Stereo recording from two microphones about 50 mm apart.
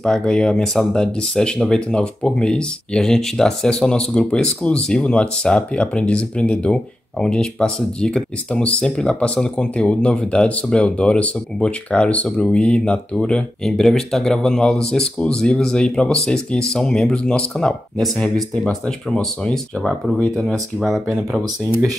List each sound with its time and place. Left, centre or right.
0.0 s speech: centre
19.5 s speech: centre